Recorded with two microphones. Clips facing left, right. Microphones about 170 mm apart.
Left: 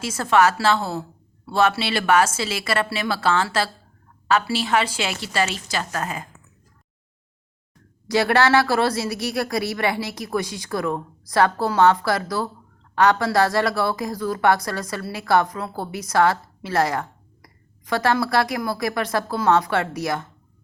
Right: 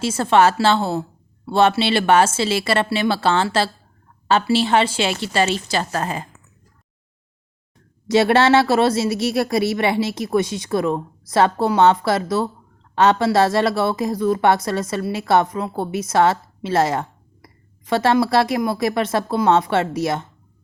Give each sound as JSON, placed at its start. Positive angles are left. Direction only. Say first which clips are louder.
{"t": 0.0, "sound": "a woman's voice", "louder": "right 3 dB", "side_deg": -25}
{"t": 8.0, "sound": "a woman's voice", "louder": "right 4 dB", "side_deg": -25}